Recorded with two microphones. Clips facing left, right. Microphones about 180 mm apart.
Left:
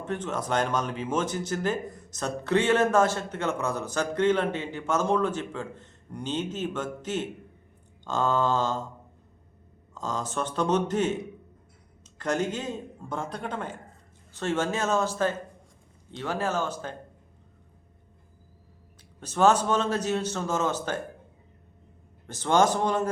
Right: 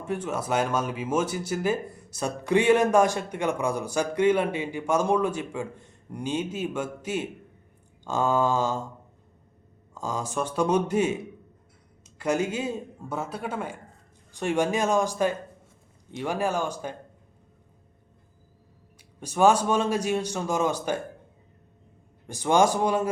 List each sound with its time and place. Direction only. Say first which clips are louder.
0.0 s speech: right 1 dB; 10° right (ahead or behind)
9.9 s speech: right 1 dB; 10° right (ahead or behind)
19.2 s speech: right 1 dB; 10° right (ahead or behind)
22.3 s speech: right 1 dB; 10° right (ahead or behind)